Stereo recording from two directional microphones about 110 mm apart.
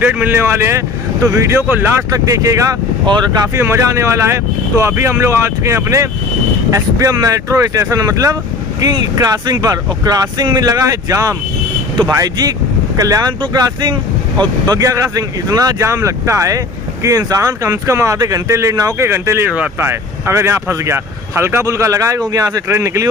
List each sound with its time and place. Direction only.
0.0 s speech: 15° right (ahead or behind)
2.0 s speech: 30° right (ahead or behind)
19.5 s speech: 10° right (ahead or behind)
19.9 s speech: 25° right (ahead or behind)